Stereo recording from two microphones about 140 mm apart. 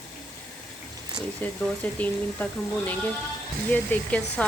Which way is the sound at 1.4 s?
10° left (ahead or behind).